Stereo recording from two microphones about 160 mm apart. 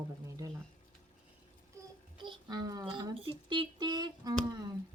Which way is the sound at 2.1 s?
25° right (ahead or behind).